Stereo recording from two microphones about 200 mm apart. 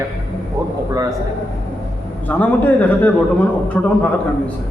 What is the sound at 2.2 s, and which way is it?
A man's voice, 10° left (ahead or behind).